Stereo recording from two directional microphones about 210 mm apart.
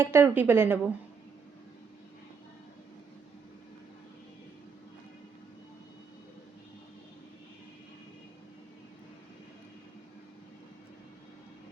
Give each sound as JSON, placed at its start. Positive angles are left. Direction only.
{"t": 0.0, "sound": "speech", "side_deg": -10}